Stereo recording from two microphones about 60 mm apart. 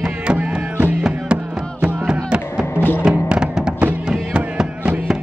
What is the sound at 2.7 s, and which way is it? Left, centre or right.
Music, left.